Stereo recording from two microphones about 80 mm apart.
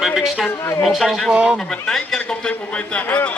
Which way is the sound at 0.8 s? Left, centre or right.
Centre.